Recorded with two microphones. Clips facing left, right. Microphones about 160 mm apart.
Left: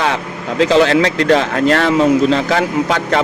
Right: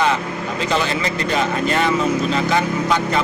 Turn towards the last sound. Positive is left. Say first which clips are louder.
# left 3 dB
turn(degrees=85)